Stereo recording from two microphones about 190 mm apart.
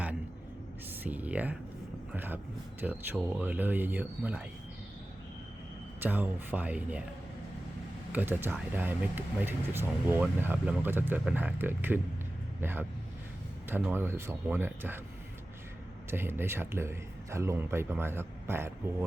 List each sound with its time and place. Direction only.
1.0 s speech: 10° right (ahead or behind)
6.0 s speech: 10° right (ahead or behind)
8.1 s speech: 10° right (ahead or behind)
16.0 s speech: 10° right (ahead or behind)